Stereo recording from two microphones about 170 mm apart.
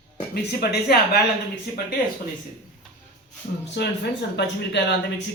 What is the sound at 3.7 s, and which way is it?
Speech, 85° left.